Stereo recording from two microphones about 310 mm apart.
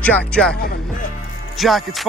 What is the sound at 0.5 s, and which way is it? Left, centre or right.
Music, left.